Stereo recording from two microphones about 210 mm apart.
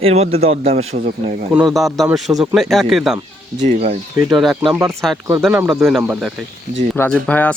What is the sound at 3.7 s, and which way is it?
Speech, 35° right (ahead or behind).